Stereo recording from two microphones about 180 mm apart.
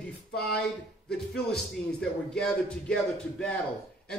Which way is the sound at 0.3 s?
65° left (ahead or behind).